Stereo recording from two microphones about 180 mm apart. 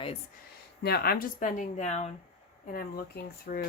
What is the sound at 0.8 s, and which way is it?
Speech, 65° left (ahead or behind).